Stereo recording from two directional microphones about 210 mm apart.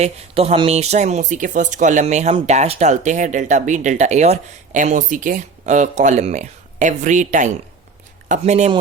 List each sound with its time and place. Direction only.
0.0 s speech: 30° right (ahead or behind)